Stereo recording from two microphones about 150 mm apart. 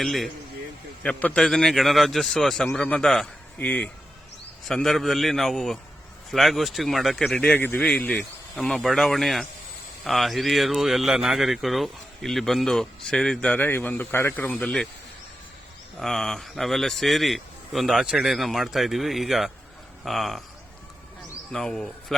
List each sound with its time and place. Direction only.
0.0 s a man's voice: centre (ahead or behind)
16.0 s speech: 5° left (ahead or behind)
21.5 s speech: 5° left (ahead or behind)